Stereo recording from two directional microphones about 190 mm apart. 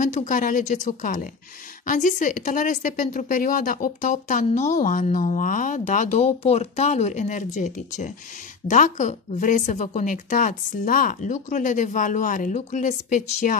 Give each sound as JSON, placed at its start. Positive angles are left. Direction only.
{"t": 0.0, "sound": "speech", "side_deg": 40}